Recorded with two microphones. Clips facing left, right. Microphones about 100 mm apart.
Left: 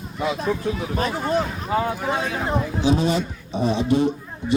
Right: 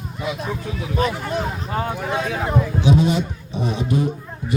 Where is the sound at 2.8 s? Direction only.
35° left (ahead or behind).